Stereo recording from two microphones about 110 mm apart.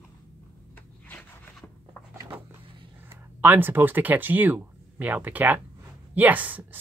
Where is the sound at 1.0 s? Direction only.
15° left (ahead or behind).